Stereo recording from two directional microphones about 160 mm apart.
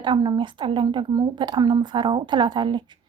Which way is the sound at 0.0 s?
30° right (ahead or behind).